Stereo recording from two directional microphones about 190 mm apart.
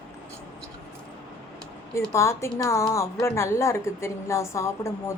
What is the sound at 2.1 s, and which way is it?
A woman's voice, 15° left (ahead or behind).